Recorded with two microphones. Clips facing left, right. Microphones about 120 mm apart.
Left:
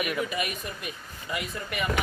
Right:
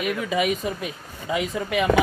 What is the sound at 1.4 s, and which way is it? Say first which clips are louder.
Speech: right 11 dB; 90° right.